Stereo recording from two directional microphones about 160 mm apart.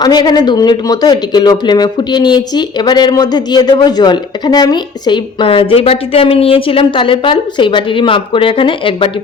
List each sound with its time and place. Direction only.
0.0 s speech: 25° left (ahead or behind)